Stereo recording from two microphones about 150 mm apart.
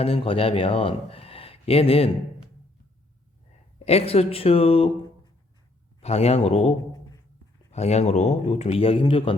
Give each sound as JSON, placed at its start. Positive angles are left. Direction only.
{"t": 0.0, "sound": "speech", "side_deg": 40}
{"t": 3.8, "sound": "speech", "side_deg": 45}
{"t": 6.0, "sound": "a man's voice", "side_deg": 45}